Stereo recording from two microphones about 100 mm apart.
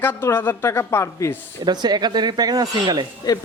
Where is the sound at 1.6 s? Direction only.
45° right (ahead or behind).